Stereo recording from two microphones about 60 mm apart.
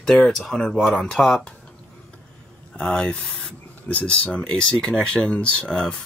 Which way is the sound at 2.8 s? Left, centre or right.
Centre.